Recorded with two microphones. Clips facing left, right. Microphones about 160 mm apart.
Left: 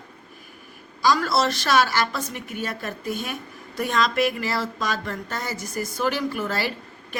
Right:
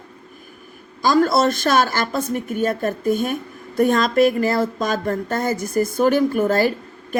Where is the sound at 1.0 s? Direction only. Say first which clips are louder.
Right 5 dB; 50° right (ahead or behind).